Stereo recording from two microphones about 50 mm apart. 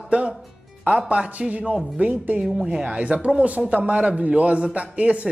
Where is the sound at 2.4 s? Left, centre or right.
Centre.